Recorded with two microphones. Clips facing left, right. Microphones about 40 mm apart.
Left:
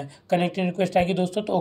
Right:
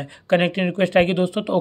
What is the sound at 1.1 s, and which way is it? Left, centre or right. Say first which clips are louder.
Speech: right 3 dB; right.